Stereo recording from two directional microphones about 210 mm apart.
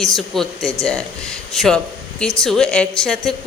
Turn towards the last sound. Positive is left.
turn(degrees=0)  # may be behind; listen again after turning